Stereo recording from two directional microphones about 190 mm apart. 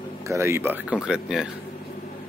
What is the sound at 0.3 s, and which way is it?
Speech, 15° right (ahead or behind).